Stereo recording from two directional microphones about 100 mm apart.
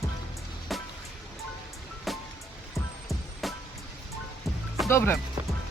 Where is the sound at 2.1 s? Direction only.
Centre (ahead or behind).